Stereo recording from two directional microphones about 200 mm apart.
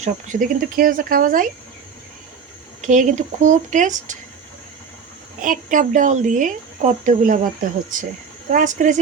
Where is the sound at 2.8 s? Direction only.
40° right (ahead or behind).